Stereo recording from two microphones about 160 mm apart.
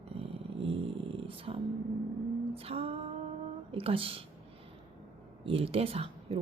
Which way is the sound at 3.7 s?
35° right (ahead or behind).